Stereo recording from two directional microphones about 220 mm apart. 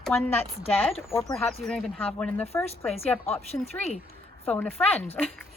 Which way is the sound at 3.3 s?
30° left (ahead or behind).